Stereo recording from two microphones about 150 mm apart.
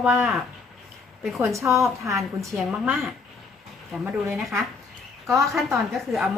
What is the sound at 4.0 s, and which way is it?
Speech, 15° right (ahead or behind).